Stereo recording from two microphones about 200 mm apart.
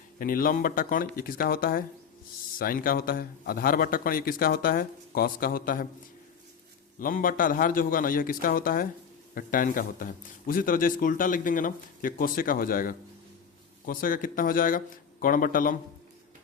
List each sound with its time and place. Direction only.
0.2 s a man's voice: 45° left (ahead or behind)
7.0 s a man's voice: 45° left (ahead or behind)